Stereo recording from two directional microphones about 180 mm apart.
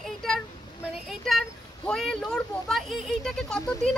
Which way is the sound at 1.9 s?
5° left (ahead or behind).